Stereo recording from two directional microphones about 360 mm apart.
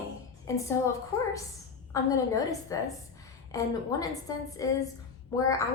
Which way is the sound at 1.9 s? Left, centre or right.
Centre.